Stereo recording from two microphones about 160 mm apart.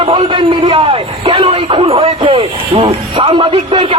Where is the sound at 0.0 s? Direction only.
30° right (ahead or behind).